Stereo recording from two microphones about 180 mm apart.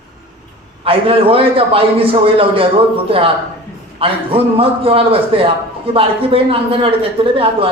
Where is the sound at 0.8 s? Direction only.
30° right (ahead or behind).